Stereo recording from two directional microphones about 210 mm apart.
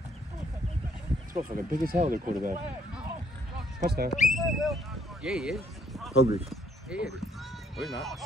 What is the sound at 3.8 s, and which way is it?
Speech, 50° right (ahead or behind).